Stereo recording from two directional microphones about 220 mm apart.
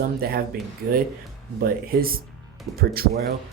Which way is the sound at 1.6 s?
40° right (ahead or behind).